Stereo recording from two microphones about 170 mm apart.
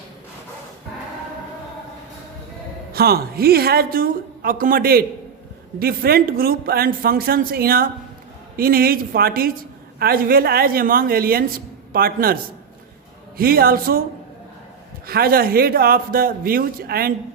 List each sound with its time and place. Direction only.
2.9 s speech: 65° right (ahead or behind)
15.0 s speech: 65° right (ahead or behind)